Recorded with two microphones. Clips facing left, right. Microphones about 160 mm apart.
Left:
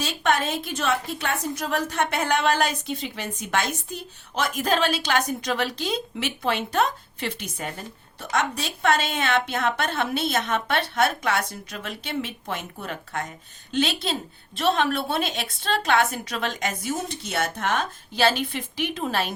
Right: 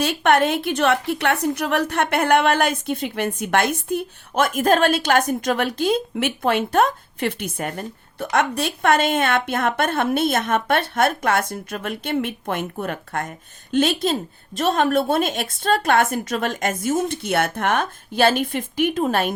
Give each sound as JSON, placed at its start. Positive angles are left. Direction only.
{"t": 0.0, "sound": "a woman's voice", "side_deg": -60}